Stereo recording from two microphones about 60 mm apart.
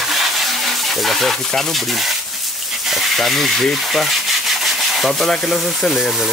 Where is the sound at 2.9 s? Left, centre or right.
Centre.